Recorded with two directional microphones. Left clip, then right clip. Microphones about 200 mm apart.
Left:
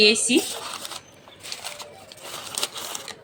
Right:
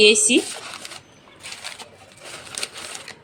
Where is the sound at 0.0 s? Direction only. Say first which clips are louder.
Right 3 dB; 5° right (ahead or behind).